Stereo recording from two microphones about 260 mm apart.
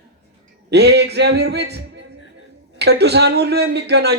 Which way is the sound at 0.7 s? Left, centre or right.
Right.